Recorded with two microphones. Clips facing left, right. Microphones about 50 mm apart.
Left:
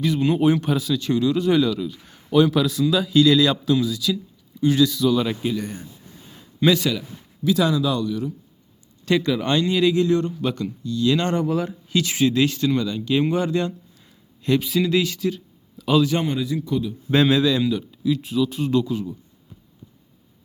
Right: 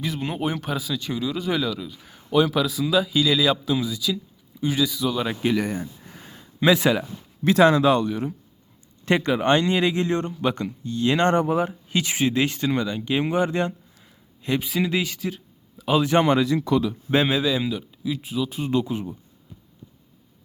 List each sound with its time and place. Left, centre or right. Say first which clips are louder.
0.0 s a man's voice: left 8 dB; centre
6.6 s speech: right 1 dB; centre
7.4 s speech: right 4 dB; right
13.9 s speech: left 1 dB; centre
16.0 s speech: right 1 dB; right
16.2 s speech: right 4 dB; right
17.1 s a man's voice: left 4 dB; centre
18.7 s speech: left 2 dB; right